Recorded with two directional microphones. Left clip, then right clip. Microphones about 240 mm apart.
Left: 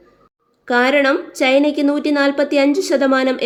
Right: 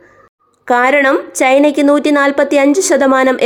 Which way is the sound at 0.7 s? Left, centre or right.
Centre.